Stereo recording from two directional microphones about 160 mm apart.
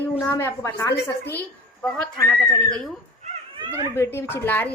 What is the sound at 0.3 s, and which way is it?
Speech, 15° left (ahead or behind).